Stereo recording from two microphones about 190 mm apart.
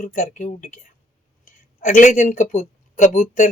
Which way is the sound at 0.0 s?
45° left (ahead or behind).